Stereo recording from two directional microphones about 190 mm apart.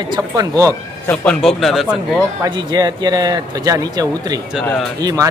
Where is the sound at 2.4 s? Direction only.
20° right (ahead or behind).